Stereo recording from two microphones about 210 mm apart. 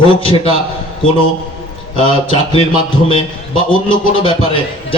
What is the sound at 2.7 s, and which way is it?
A man's voice, 25° left (ahead or behind).